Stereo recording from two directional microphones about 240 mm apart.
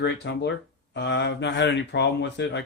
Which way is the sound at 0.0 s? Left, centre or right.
Left.